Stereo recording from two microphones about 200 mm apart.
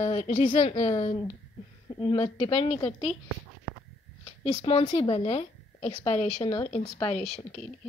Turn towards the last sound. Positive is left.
turn(degrees=35)  # may be behind; listen again after turning